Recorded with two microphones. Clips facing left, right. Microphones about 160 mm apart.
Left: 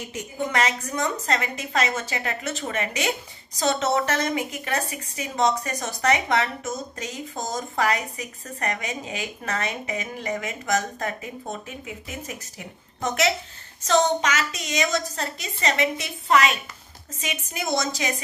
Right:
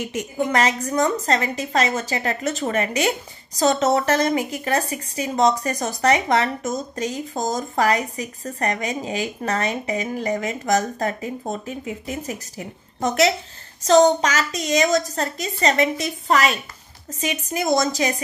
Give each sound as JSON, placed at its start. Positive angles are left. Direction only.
{"t": 0.5, "sound": "a woman's voice", "side_deg": -40}